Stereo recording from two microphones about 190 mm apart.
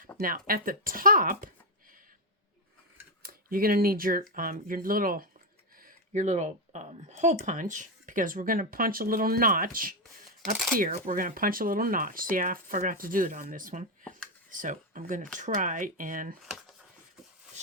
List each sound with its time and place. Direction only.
0.2 s speech: 50° right (ahead or behind)
3.2 s speech: 50° right (ahead or behind)